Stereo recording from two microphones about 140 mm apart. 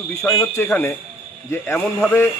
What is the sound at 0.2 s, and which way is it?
Speech, 15° left (ahead or behind).